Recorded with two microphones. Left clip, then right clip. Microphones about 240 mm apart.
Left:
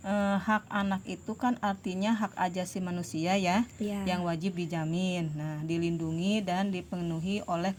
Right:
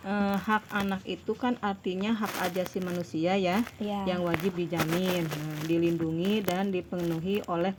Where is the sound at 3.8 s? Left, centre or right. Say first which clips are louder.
Right 3 dB; left.